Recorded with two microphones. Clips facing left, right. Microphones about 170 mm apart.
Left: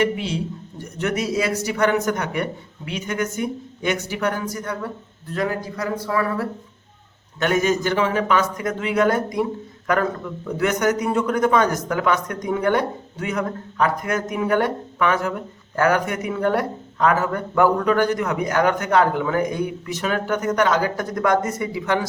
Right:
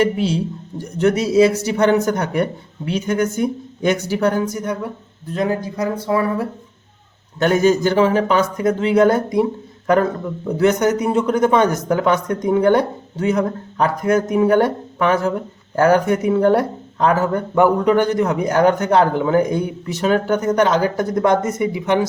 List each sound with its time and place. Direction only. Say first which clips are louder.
0.0 s speech: right 4 dB; 35° right (ahead or behind); by 6.5 s 20° right (ahead or behind)
7.3 s speech: right 5 dB; 35° right (ahead or behind)